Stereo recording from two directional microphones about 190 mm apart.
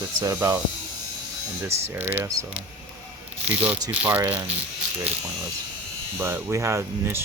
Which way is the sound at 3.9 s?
10° right (ahead or behind).